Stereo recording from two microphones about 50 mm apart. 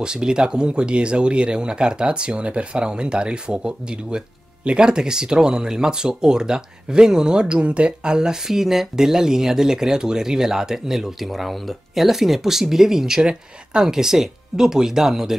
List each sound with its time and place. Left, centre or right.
0.0 s speech: centre